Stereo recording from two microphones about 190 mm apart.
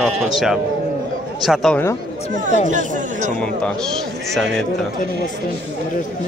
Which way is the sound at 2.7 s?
40° right (ahead or behind).